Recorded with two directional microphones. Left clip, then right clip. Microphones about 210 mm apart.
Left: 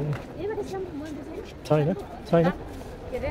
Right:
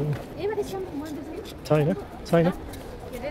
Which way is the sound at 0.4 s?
35° right (ahead or behind).